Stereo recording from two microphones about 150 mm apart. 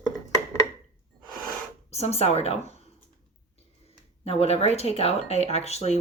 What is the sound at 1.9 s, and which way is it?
Speech, 45° left (ahead or behind).